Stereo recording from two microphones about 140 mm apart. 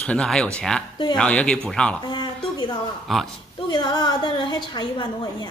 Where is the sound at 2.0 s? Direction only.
35° left (ahead or behind).